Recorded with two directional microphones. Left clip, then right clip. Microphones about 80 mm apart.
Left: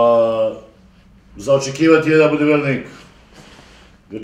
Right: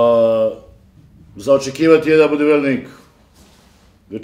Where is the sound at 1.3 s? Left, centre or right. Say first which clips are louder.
Right 1 dB; left.